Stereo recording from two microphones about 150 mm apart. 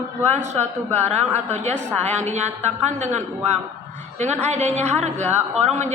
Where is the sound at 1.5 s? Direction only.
50° right (ahead or behind).